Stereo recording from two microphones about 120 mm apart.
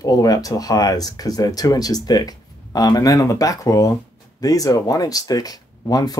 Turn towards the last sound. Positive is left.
turn(degrees=30)  # may be behind; listen again after turning